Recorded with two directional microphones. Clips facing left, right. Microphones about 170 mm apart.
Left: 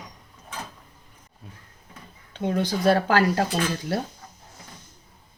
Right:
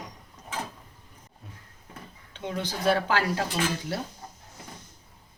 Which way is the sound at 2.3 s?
45° left (ahead or behind).